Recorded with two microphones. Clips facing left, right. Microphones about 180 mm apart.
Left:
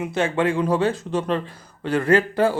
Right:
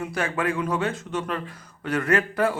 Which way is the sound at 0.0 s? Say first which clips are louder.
Left 5 dB; 25° left (ahead or behind).